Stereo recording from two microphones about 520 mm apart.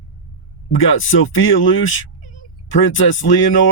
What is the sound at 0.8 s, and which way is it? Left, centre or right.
Speech, left.